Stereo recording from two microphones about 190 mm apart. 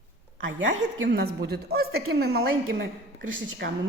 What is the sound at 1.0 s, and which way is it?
A woman's voice, 55° right (ahead or behind).